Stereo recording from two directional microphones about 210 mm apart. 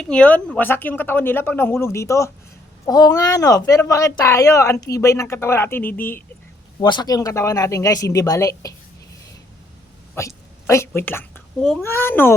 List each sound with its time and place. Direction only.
0.0 s a woman's voice: 5° left (ahead or behind)
6.7 s a woman's voice: 20° left (ahead or behind)
10.2 s a woman's voice: 15° left (ahead or behind)